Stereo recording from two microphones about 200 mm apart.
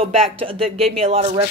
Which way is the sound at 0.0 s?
30° right (ahead or behind).